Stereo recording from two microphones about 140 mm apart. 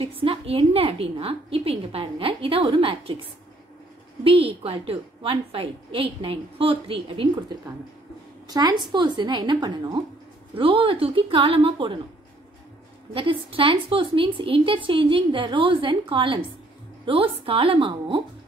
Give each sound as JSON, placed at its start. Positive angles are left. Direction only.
{"t": 0.0, "sound": "a woman's voice", "side_deg": -40}
{"t": 4.2, "sound": "a woman's voice", "side_deg": -40}
{"t": 13.1, "sound": "a woman's voice", "side_deg": -40}